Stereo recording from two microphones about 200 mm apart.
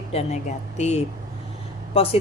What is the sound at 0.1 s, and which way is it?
A woman's voice, 30° left (ahead or behind).